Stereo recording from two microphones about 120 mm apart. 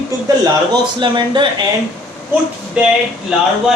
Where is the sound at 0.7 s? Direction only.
40° right (ahead or behind).